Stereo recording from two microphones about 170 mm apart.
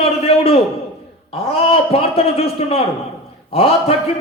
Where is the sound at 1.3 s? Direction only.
35° left (ahead or behind).